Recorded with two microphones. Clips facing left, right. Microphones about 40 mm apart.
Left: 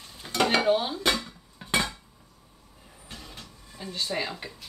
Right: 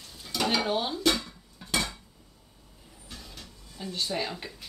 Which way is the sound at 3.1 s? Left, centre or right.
Left.